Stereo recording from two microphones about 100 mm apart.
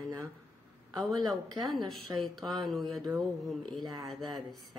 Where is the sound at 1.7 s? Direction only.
Centre (ahead or behind).